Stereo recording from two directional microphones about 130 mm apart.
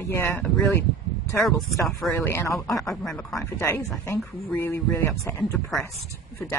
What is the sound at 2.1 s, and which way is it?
Speech, 20° left (ahead or behind).